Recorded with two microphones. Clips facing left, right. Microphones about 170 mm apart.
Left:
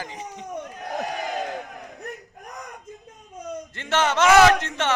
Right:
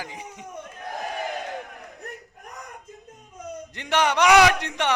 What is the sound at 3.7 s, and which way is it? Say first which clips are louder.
Speech: even; 15° right (ahead or behind).